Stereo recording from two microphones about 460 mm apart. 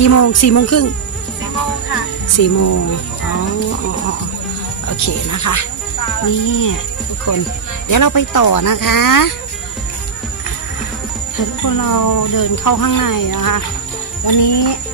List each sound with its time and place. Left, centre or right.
0.0 s speech: left
2.4 s speech: left
4.8 s speech: left
11.3 s jingle bell: left
14.2 s jingle bell: left